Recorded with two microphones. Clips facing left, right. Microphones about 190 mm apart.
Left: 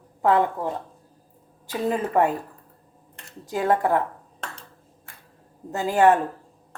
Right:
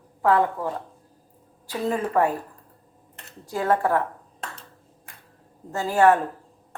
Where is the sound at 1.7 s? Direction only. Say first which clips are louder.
Left 1 dB; 20° left (ahead or behind).